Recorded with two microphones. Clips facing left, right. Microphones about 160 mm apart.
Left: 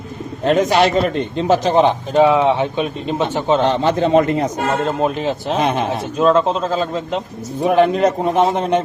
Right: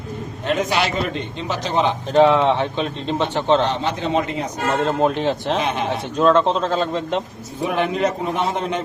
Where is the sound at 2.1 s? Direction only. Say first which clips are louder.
Left 1 dB; 10° left (ahead or behind).